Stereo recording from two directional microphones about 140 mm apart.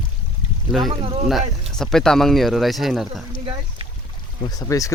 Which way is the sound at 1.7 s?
5° left (ahead or behind).